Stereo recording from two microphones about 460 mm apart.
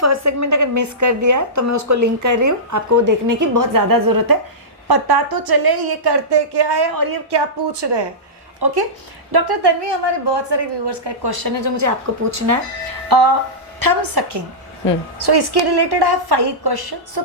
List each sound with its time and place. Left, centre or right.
0.0 s a woman's voice: right
13.1 s music: right
13.7 s a woman's voice: right